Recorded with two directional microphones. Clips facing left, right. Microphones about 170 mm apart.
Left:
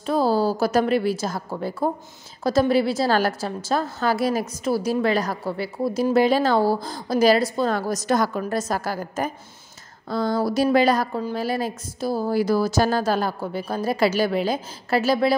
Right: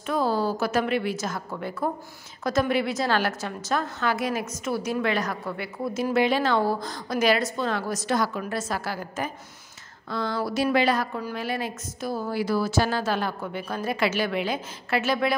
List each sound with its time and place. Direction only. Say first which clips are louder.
0.0 s a woman's voice: left 4 dB; 35° left (ahead or behind)